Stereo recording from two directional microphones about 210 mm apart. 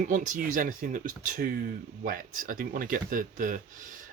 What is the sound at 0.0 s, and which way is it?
Speech, 40° right (ahead or behind).